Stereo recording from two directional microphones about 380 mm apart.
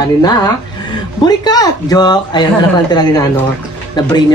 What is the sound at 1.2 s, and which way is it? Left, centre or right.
Speech, centre.